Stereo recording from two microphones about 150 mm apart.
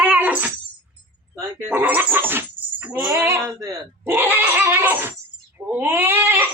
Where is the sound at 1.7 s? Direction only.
10° right (ahead or behind).